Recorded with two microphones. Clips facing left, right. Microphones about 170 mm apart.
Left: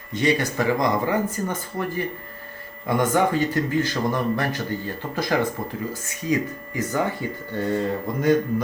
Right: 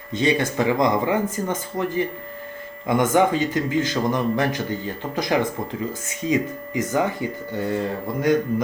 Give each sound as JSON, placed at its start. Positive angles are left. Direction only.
{"t": 0.1, "sound": "a man's voice", "side_deg": -20}